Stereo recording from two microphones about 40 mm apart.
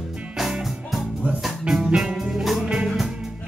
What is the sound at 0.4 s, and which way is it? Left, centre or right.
Music, centre.